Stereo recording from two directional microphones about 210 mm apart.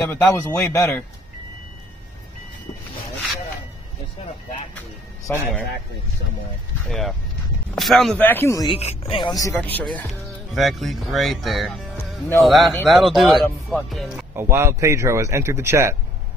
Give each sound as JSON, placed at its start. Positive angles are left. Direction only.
{"t": 0.1, "sound": "speech", "side_deg": 10}
{"t": 5.4, "sound": "speech", "side_deg": 5}
{"t": 6.9, "sound": "speech", "side_deg": 0}
{"t": 8.7, "sound": "speech", "side_deg": 30}